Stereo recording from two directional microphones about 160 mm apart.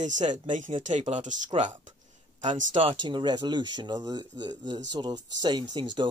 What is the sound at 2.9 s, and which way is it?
Speech, 30° right (ahead or behind).